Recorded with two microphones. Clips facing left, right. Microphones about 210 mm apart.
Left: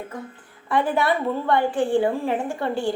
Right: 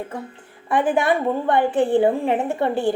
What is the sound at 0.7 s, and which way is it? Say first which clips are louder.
A woman's voice: right 3 dB; 20° right (ahead or behind).